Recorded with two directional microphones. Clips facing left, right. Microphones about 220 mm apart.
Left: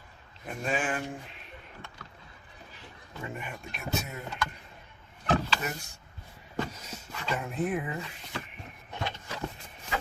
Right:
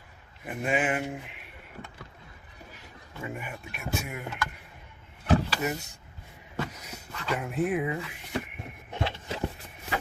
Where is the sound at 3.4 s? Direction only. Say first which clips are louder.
Right 1 dB; 10° right (ahead or behind).